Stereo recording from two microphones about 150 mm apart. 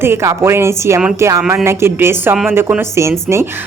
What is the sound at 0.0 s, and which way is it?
A woman's voice, 20° right (ahead or behind).